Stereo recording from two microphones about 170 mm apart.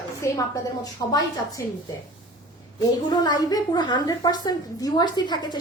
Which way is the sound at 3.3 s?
20° left (ahead or behind).